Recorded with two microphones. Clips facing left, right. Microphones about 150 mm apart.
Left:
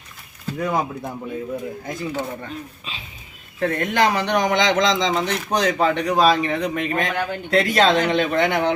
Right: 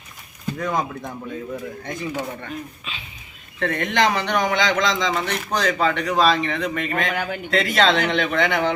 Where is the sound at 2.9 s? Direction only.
35° left (ahead or behind).